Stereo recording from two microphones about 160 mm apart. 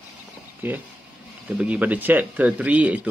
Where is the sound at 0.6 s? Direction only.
10° right (ahead or behind).